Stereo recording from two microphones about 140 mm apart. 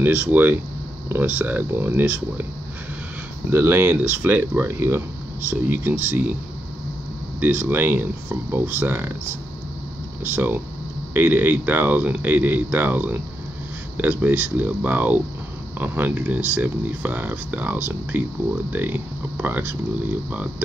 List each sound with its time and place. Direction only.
0.0 s speech: 10° right (ahead or behind)
3.5 s speech: 20° right (ahead or behind)
7.3 s speech: 15° right (ahead or behind)
10.2 s speech: 15° right (ahead or behind)